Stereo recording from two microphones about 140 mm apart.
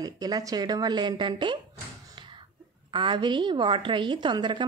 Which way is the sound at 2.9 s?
35° right (ahead or behind).